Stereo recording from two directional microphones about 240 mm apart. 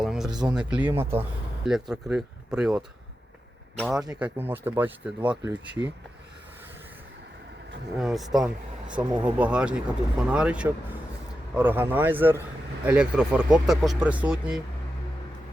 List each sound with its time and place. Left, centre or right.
0.0 s a sound: centre
0.4 s speech: centre
4.0 s speech: centre
5.2 s speech: right
7.9 s speech: centre